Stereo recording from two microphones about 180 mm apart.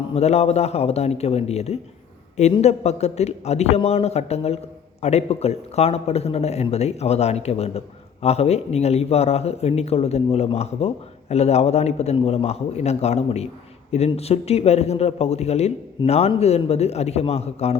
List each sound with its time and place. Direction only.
0.1 s speech: 35° left (ahead or behind)